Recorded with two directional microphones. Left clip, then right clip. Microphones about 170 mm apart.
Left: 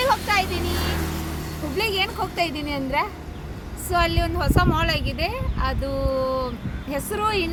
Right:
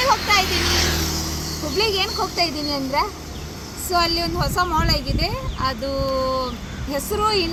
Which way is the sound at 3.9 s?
10° left (ahead or behind).